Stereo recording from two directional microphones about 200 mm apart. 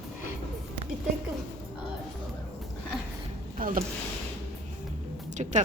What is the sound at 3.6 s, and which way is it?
Speech, 45° right (ahead or behind).